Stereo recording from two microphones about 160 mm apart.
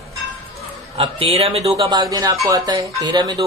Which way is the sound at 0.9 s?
35° right (ahead or behind).